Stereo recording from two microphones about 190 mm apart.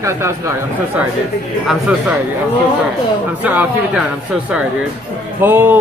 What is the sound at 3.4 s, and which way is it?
Speech, 10° right (ahead or behind).